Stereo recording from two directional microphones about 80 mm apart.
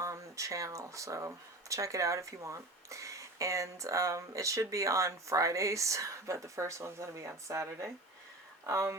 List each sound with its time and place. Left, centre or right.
0.0 s speech: right